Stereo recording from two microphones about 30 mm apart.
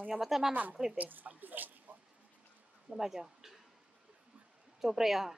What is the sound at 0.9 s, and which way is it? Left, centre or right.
Speech, right.